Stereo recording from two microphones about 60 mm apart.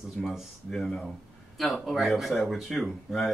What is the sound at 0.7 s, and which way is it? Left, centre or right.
Speech, centre.